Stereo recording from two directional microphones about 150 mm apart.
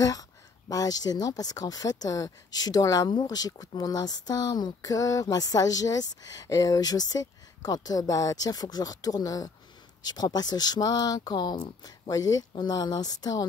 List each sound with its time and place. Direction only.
0.0 s speech: 25° left (ahead or behind)